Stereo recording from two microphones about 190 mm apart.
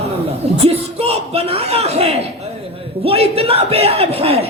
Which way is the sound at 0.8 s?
30° right (ahead or behind).